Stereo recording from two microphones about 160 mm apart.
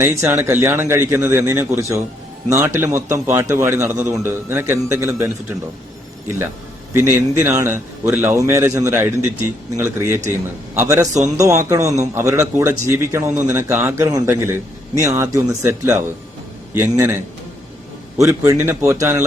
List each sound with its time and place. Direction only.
0.0 s a man's voice: 15° right (ahead or behind)
6.9 s a man's voice: 15° right (ahead or behind)
18.2 s a man's voice: 20° right (ahead or behind)